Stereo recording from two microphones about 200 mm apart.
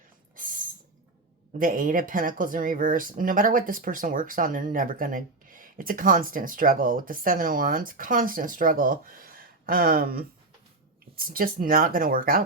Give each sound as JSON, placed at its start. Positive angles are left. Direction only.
{"t": 0.3, "sound": "a sound", "side_deg": -40}
{"t": 1.5, "sound": "speech", "side_deg": -45}
{"t": 11.3, "sound": "speech", "side_deg": -45}